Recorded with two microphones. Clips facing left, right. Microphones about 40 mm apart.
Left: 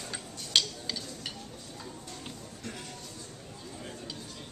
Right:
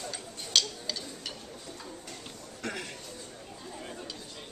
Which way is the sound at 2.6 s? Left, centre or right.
Right.